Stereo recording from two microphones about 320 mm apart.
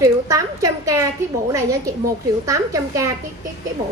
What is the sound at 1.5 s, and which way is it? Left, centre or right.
A woman's voice, centre.